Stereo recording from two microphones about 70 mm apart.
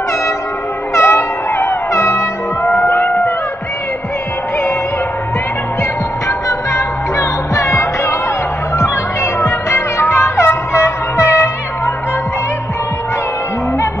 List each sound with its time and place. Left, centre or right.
0.9 s music: left
2.8 s a sound: left
6.2 s music: left